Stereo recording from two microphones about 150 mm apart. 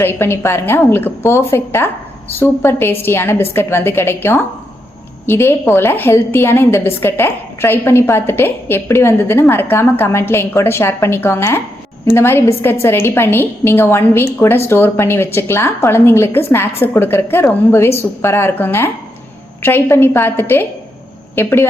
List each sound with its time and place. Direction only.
0.0 s a woman's voice: 15° left (ahead or behind)